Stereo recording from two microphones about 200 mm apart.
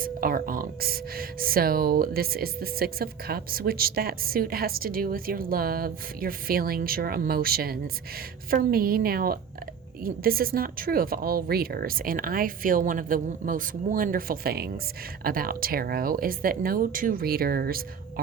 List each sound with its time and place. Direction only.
0.0 s speech: 45° right (ahead or behind)